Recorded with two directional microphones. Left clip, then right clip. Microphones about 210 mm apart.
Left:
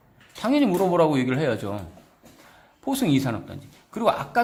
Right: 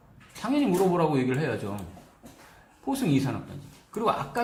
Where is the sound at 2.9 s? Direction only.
35° left (ahead or behind).